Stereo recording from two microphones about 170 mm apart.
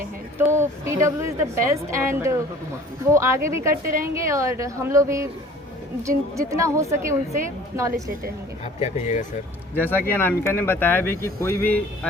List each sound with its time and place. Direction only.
0.3 s a woman's voice: 15° right (ahead or behind)
8.6 s speech: 40° left (ahead or behind)
9.7 s speech: 10° left (ahead or behind)